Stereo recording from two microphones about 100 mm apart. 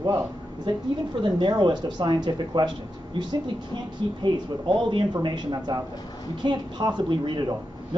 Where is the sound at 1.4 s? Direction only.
50° right (ahead or behind).